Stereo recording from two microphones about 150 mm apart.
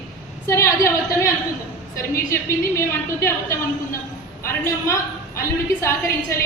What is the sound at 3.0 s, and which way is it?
A woman's voice, 15° left (ahead or behind).